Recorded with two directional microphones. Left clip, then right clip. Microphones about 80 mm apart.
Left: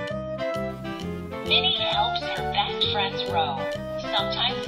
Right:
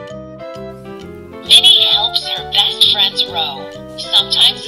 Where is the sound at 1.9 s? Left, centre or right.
Right.